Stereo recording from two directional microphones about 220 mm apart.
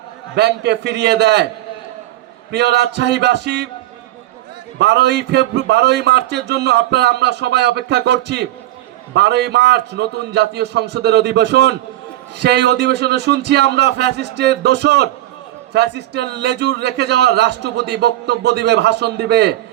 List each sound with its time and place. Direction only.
0.3 s a man's voice: 50° right (ahead or behind)
2.5 s a man's voice: 50° right (ahead or behind)
4.8 s a man's voice: 50° right (ahead or behind)